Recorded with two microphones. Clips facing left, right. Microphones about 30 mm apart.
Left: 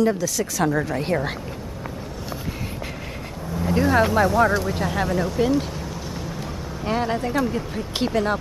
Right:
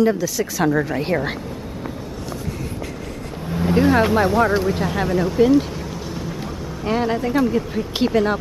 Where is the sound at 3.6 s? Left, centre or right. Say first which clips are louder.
Right 4 dB; right.